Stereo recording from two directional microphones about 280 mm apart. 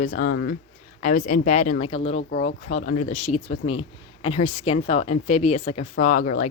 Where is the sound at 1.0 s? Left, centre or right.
Left.